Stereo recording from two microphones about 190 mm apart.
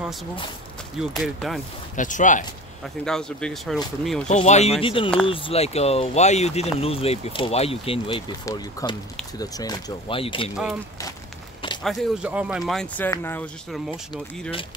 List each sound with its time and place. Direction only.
0.0 s speech: centre (ahead or behind)
2.0 s speech: 40° left (ahead or behind)
2.8 s speech: 5° left (ahead or behind)
4.3 s speech: 35° left (ahead or behind)
10.5 s speech: 5° right (ahead or behind)
11.8 s speech: centre (ahead or behind)
13.7 s speech: centre (ahead or behind)